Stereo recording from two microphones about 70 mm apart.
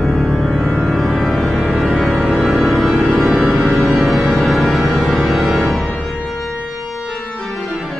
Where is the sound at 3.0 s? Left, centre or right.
Right.